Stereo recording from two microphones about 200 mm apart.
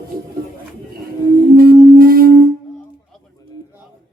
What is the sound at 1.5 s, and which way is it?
Singing bowl, 45° right (ahead or behind).